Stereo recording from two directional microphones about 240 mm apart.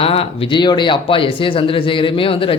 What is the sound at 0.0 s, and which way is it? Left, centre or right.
Speech, left.